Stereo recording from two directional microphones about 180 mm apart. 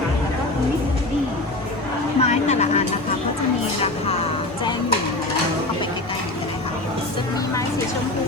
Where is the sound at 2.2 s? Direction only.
35° left (ahead or behind).